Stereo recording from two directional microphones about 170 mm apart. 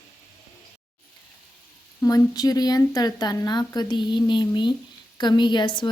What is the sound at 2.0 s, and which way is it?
Speech, 20° left (ahead or behind).